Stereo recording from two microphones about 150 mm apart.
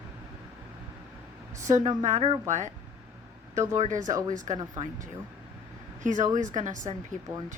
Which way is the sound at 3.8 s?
55° right (ahead or behind).